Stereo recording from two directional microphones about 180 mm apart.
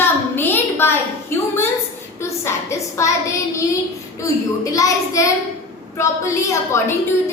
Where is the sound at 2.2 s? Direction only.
15° left (ahead or behind).